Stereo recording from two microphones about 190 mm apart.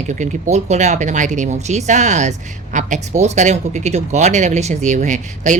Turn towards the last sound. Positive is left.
turn(degrees=-40)  # may be behind; listen again after turning